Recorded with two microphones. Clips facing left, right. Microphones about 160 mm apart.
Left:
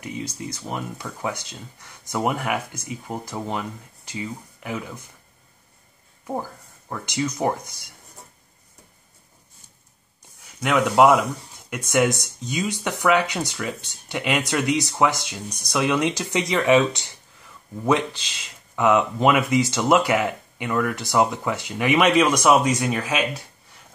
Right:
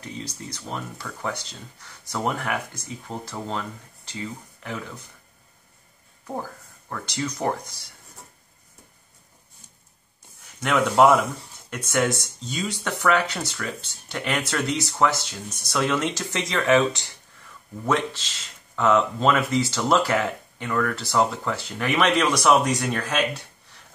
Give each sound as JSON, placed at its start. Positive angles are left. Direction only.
{"t": 0.0, "sound": "speech", "side_deg": 10}
{"t": 6.2, "sound": "speech", "side_deg": 15}
{"t": 10.4, "sound": "speech", "side_deg": 5}
{"t": 18.2, "sound": "speech", "side_deg": 15}
{"t": 22.3, "sound": "speech", "side_deg": 15}
{"t": 22.6, "sound": "speech", "side_deg": 5}